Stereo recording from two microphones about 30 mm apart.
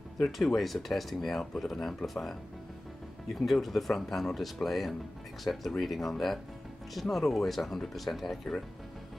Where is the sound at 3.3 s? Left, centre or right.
Centre.